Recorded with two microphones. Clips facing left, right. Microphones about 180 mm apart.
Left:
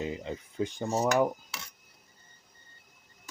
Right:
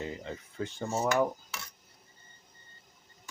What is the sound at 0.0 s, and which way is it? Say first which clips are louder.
Cutlery: left 3 dB; 15° left (ahead or behind).